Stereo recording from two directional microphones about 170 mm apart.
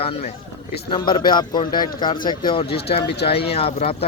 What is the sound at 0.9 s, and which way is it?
A man's voice, 30° left (ahead or behind).